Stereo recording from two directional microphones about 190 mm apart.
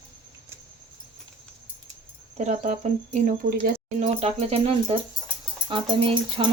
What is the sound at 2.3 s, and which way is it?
Speech, 35° right (ahead or behind).